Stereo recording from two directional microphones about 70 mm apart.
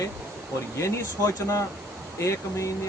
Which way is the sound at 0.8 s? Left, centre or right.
Left.